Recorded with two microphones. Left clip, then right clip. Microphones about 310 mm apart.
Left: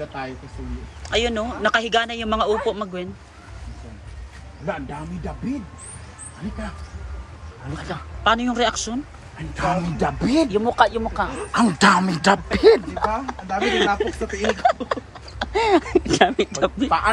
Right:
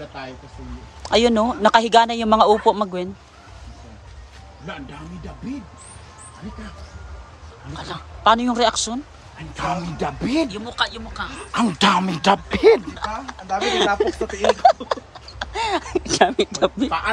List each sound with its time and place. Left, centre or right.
1.0 s speech: centre
8.2 s speech: centre
9.6 s speech: centre
11.6 s speech: centre
12.9 s speech: centre